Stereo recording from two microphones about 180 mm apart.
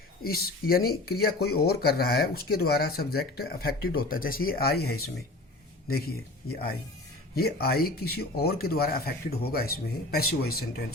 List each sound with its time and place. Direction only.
0.2 s speech: 55° left (ahead or behind)
7.3 s speech: 60° left (ahead or behind)